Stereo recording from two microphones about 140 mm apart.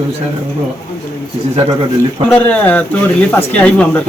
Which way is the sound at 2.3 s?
10° left (ahead or behind).